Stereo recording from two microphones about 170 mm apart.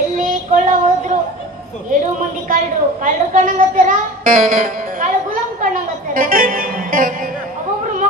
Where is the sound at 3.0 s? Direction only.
50° right (ahead or behind).